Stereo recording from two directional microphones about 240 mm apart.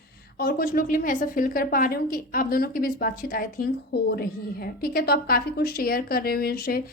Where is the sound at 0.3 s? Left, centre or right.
Left.